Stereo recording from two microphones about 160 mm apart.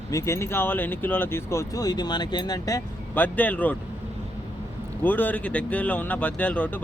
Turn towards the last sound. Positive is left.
turn(degrees=10)  # may be behind; listen again after turning